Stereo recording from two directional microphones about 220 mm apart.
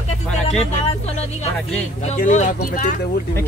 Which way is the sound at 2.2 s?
35° left (ahead or behind).